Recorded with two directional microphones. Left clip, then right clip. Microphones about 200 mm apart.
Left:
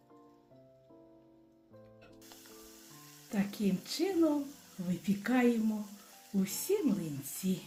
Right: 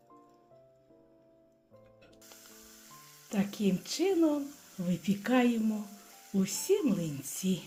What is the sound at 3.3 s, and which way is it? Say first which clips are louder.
A woman's voice: right 3 dB; 25° right (ahead or behind).